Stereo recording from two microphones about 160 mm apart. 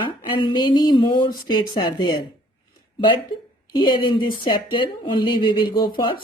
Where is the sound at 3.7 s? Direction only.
30° left (ahead or behind).